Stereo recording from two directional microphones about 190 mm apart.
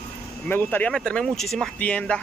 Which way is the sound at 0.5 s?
10° left (ahead or behind).